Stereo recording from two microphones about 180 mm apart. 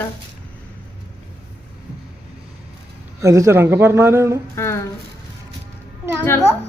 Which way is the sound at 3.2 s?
15° right (ahead or behind).